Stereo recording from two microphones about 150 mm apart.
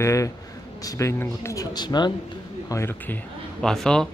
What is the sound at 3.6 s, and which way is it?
Speech, 5° left (ahead or behind).